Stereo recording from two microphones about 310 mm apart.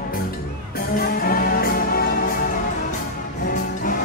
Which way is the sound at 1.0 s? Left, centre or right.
Left.